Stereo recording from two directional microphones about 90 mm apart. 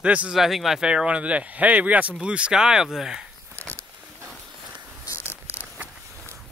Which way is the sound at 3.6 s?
35° right (ahead or behind).